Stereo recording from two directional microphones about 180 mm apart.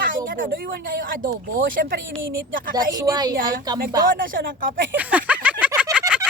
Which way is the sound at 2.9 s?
20° right (ahead or behind).